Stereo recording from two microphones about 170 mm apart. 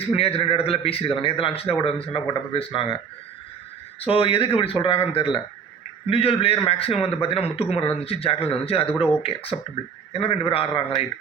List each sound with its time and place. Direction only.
0.1 s a man's voice: 35° left (ahead or behind)
4.0 s a man's voice: 35° left (ahead or behind)